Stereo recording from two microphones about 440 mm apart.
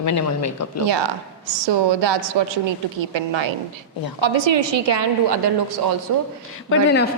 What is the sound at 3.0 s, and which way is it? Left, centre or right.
A woman's voice, right.